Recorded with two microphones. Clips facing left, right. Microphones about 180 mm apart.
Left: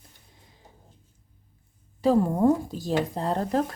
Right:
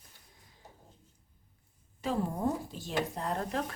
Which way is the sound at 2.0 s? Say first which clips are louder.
Left 11 dB; 40° left (ahead or behind).